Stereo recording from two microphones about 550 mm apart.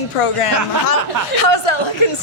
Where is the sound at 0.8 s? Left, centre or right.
Left.